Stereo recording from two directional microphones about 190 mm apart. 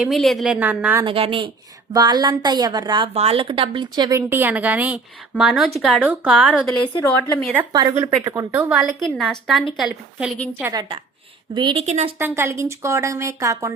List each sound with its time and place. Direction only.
0.0 s a woman's voice: centre (ahead or behind)
1.0 s a woman's voice: 30° right (ahead or behind); by 6.7 s 5° right (ahead or behind)
7.6 s speech: 20° right (ahead or behind)
8.7 s a woman's voice: centre (ahead or behind)
10.6 s a woman's voice: 20° right (ahead or behind)
11.9 s a woman's voice: 35° right (ahead or behind)
12.2 s speech: 15° right (ahead or behind)